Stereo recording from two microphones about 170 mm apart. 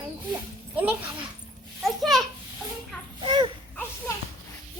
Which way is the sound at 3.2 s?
30° right (ahead or behind).